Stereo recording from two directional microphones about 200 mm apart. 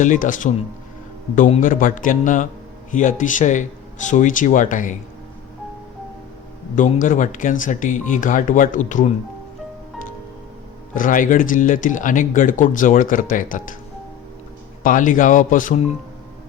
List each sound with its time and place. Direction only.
0.0 s speech: 40° left (ahead or behind)
6.7 s speech: 40° left (ahead or behind)
10.9 s speech: 40° left (ahead or behind)
14.8 s speech: 40° left (ahead or behind)